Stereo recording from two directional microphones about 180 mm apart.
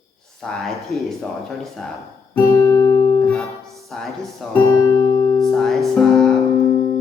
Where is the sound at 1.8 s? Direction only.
5° left (ahead or behind).